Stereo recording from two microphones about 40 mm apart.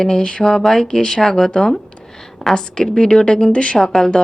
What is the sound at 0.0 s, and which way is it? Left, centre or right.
Speech, left.